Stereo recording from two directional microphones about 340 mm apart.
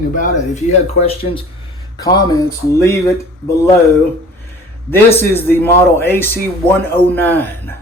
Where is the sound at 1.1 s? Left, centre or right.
Centre.